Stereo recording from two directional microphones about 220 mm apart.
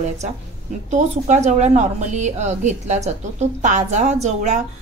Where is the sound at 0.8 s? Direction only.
30° right (ahead or behind).